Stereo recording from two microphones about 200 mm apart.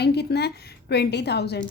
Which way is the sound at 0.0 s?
55° left (ahead or behind).